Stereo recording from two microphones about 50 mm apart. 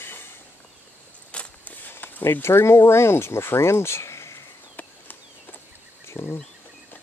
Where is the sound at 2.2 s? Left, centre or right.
Left.